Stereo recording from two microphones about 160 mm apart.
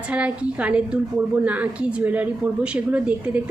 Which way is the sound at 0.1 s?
10° right (ahead or behind).